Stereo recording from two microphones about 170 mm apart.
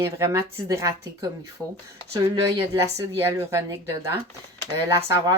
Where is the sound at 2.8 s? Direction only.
15° right (ahead or behind).